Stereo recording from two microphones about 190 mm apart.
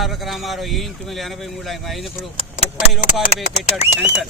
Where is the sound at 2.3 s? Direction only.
35° left (ahead or behind).